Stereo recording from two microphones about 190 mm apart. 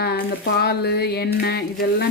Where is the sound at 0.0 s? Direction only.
55° left (ahead or behind).